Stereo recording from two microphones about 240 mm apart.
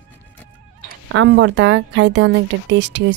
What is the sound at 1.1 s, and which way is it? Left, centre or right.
A woman's voice, right.